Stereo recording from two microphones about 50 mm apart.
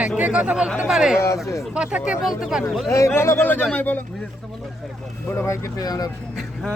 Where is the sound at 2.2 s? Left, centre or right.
Centre.